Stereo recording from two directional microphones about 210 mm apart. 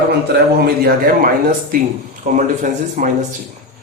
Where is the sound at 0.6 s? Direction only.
45° right (ahead or behind).